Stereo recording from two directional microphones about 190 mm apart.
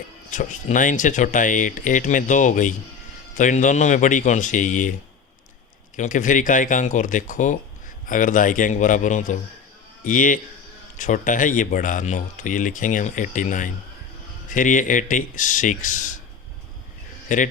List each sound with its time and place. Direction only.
0.3 s speech: 40° left (ahead or behind)
6.0 s speech: 40° left (ahead or behind)
17.2 s speech: 40° left (ahead or behind)